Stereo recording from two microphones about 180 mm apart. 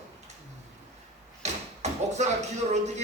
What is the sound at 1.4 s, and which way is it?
Door, 40° right (ahead or behind).